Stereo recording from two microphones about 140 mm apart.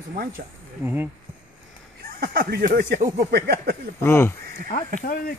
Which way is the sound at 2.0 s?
90° right.